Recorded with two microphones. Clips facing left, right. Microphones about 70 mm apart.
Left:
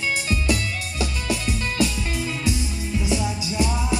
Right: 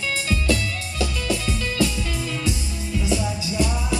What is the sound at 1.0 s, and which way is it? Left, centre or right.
Music, left.